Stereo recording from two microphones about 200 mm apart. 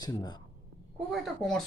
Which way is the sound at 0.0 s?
20° left (ahead or behind).